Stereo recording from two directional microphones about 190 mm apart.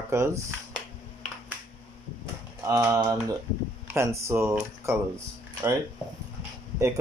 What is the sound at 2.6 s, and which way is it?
Speech, 15° right (ahead or behind).